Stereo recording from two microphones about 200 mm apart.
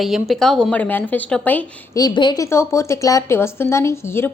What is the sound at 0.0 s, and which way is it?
Speech, centre (ahead or behind).